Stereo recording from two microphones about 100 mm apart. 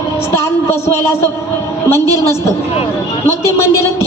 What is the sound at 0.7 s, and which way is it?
A woman's voice, 25° left (ahead or behind).